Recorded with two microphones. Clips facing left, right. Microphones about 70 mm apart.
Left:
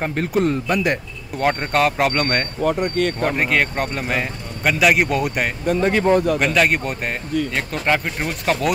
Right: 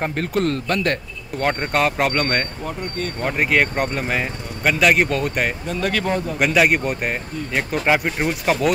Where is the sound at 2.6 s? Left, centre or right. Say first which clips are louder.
Left 8 dB; left.